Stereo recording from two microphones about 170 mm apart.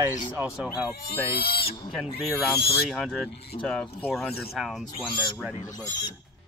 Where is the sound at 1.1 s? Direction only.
65° left (ahead or behind).